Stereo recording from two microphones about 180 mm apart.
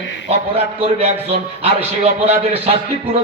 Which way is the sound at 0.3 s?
35° right (ahead or behind).